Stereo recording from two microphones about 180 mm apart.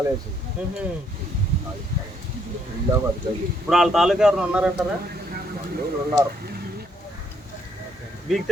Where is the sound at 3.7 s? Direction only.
Centre (ahead or behind).